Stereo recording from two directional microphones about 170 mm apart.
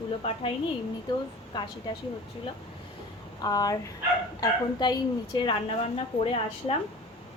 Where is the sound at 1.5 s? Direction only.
25° left (ahead or behind).